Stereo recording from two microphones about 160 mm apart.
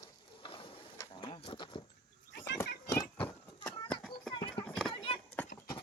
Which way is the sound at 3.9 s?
Centre (ahead or behind).